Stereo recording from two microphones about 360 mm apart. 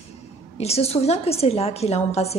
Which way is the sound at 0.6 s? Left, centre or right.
Centre.